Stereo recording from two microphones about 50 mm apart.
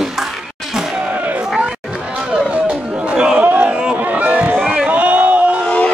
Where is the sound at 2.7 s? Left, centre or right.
Right.